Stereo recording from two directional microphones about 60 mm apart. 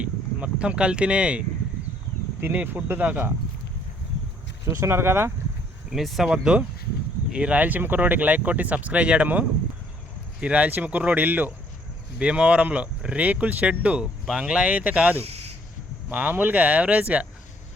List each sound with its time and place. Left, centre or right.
0.0 s speech: right
2.4 s speech: right
4.8 s speech: right
5.9 s speech: centre; by 11.5 s right
12.2 s speech: centre